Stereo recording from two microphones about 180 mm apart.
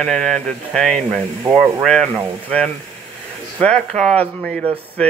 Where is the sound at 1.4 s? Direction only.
20° right (ahead or behind).